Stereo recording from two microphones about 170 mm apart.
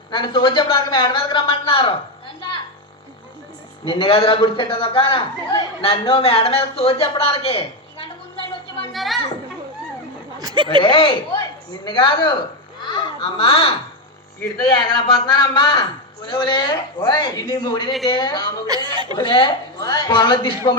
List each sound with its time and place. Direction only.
0.1 s a man's voice: 30° left (ahead or behind)
3.8 s a man's voice: 30° left (ahead or behind)
8.9 s children playing: centre (ahead or behind)
10.4 s speech: 25° right (ahead or behind)
10.8 s a man's voice: 30° left (ahead or behind)
12.8 s a sound: 30° left (ahead or behind)
14.8 s a man's voice: 25° left (ahead or behind)
18.7 s speech: 25° right (ahead or behind)
19.1 s a man's voice: 30° left (ahead or behind)